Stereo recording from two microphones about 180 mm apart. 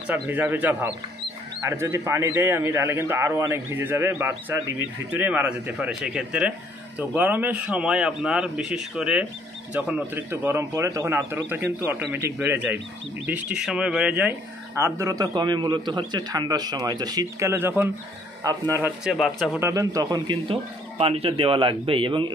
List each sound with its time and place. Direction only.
0.0 s a man's voice: 10° right (ahead or behind)
14.8 s a man's voice: 20° right (ahead or behind)
19.7 s a man's voice: 20° right (ahead or behind)